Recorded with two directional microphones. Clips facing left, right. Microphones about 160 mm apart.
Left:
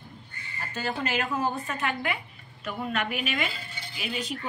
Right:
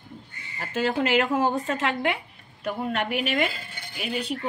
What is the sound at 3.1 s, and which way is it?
Speech, 60° right (ahead or behind).